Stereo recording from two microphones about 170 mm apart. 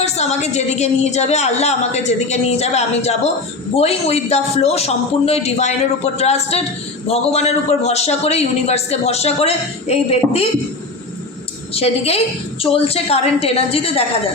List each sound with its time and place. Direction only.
0.0 s a man's voice: 40° left (ahead or behind)
11.7 s a man's voice: 35° left (ahead or behind)